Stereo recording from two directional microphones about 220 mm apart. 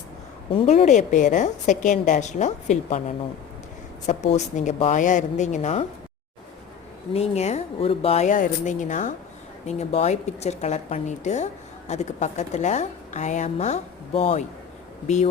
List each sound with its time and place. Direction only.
0.5 s a woman's voice: 25° left (ahead or behind)
4.0 s a woman's voice: 30° left (ahead or behind)
7.1 s a woman's voice: 30° left (ahead or behind)